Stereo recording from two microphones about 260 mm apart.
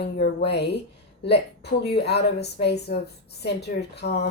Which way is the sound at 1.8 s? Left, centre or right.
Left.